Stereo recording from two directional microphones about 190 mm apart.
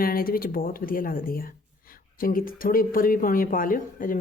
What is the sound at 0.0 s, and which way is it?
Speech, 50° left (ahead or behind).